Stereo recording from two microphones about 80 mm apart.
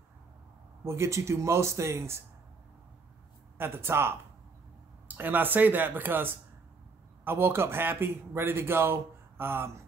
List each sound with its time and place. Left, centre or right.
0.8 s speech: right
3.5 s a man's voice: right